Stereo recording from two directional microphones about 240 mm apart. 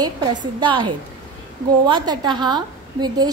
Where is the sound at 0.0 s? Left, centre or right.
Centre.